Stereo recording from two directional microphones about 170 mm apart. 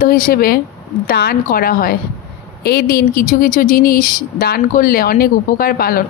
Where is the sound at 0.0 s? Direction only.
55° left (ahead or behind).